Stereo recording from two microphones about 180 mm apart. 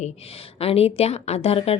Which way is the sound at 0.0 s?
35° left (ahead or behind).